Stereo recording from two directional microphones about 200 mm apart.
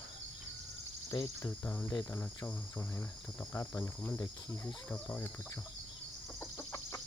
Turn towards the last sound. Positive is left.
turn(degrees=15)  # may be behind; listen again after turning